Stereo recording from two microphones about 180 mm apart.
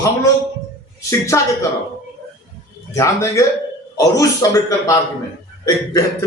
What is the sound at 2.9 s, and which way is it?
A man's voice, 15° left (ahead or behind).